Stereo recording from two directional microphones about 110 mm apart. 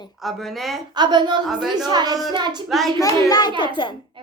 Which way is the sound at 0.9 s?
45° right (ahead or behind).